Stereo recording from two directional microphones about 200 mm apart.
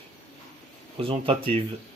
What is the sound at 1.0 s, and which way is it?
Speech, 25° right (ahead or behind).